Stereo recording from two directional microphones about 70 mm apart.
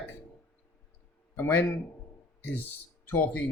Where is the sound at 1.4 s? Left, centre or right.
Left.